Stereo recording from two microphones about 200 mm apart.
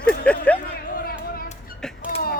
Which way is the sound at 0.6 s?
50° left (ahead or behind).